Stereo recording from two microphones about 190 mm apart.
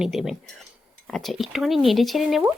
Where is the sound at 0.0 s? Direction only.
Centre (ahead or behind).